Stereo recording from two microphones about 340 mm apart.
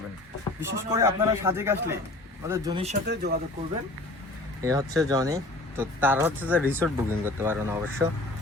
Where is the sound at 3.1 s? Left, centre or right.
Right.